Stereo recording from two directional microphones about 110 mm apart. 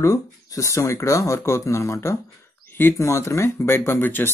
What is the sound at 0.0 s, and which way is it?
A man's voice, 30° left (ahead or behind).